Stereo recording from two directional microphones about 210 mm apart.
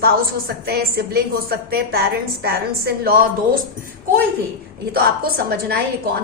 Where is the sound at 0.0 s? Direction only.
45° right (ahead or behind).